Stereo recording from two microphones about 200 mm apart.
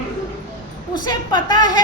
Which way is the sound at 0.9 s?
20° left (ahead or behind).